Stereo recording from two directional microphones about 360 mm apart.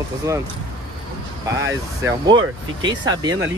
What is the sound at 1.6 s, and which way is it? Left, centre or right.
Speech, centre.